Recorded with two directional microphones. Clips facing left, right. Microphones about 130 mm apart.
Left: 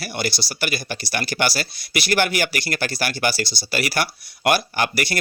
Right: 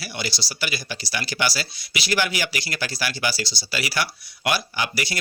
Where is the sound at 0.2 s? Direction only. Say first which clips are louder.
Left 4 dB; 55° left (ahead or behind).